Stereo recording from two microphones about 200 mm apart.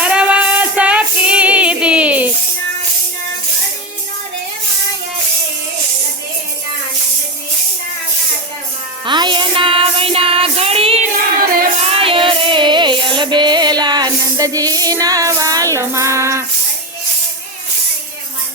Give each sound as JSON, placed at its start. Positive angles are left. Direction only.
{"t": 0.0, "sound": "child singing", "side_deg": -5}
{"t": 9.0, "sound": "music", "side_deg": -25}